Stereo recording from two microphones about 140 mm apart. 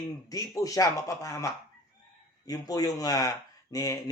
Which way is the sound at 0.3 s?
25° left (ahead or behind).